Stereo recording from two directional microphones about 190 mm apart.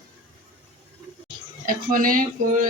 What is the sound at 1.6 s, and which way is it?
Speech, 45° right (ahead or behind).